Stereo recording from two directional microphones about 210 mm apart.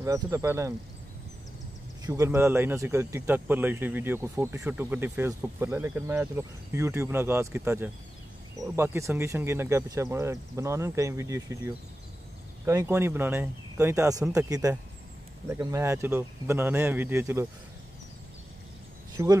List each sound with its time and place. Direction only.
0.0 s speech: 15° right (ahead or behind)
2.0 s speech: 15° right (ahead or behind)
19.2 s speech: 15° right (ahead or behind)